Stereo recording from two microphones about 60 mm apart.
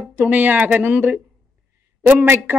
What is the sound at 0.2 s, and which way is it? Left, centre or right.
Speech, right.